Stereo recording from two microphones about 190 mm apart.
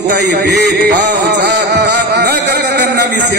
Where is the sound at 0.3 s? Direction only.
60° right (ahead or behind).